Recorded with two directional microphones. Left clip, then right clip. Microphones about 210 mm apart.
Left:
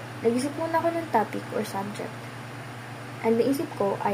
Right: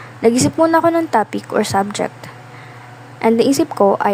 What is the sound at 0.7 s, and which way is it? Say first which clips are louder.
A woman's voice: right 11 dB; 30° right (ahead or behind).